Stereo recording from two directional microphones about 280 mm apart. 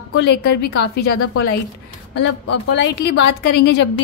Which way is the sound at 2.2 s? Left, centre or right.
Left.